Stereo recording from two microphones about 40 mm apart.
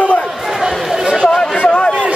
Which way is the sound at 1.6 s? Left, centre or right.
Left.